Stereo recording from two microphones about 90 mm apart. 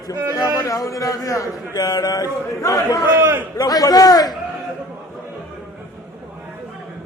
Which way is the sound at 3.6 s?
45° left (ahead or behind).